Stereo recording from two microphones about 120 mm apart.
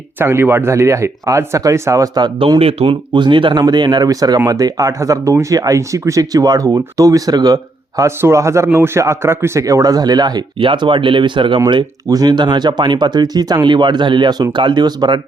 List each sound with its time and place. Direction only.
0.2 s speech: 20° right (ahead or behind)
2.6 s speech: 55° right (ahead or behind)